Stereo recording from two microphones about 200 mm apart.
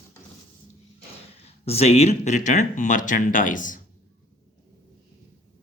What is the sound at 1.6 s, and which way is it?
Speech, 30° left (ahead or behind).